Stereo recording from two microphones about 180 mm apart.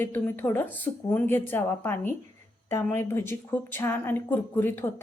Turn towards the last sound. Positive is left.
turn(degrees=10)  # may be behind; listen again after turning